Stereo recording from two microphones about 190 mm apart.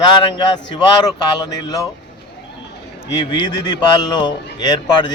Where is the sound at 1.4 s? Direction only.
20° left (ahead or behind).